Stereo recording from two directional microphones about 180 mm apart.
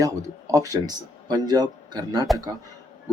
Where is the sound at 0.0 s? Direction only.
15° right (ahead or behind).